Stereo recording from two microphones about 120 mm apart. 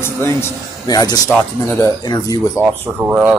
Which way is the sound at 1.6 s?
15° left (ahead or behind).